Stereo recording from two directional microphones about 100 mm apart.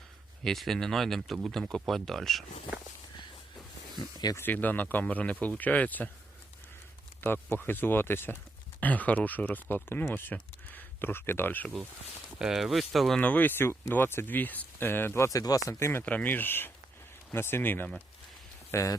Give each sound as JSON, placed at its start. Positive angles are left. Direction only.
{"t": 0.4, "sound": "speech", "side_deg": 5}
{"t": 3.9, "sound": "speech", "side_deg": 40}
{"t": 4.4, "sound": "speech", "side_deg": 15}
{"t": 7.5, "sound": "speech", "side_deg": 20}
{"t": 12.4, "sound": "speech", "side_deg": -5}
{"t": 13.1, "sound": "speech", "side_deg": 15}
{"t": 18.7, "sound": "speech", "side_deg": 30}